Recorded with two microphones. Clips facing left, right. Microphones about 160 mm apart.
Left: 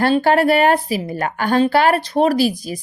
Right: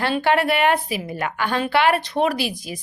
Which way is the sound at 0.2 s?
40° left (ahead or behind).